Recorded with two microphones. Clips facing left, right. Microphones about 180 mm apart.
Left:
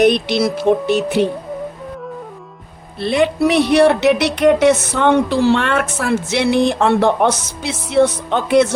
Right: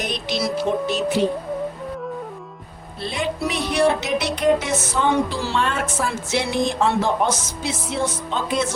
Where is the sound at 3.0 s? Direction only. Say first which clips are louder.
Left 10 dB; 70° left (ahead or behind).